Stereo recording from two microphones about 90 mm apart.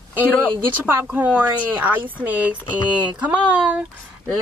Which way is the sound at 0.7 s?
20° right (ahead or behind).